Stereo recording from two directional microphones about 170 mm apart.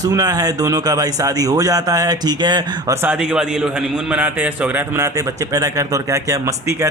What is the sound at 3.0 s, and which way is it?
A man's voice, 5° right (ahead or behind).